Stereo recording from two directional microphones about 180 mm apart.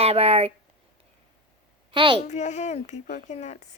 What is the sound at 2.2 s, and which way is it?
Speech, 40° left (ahead or behind).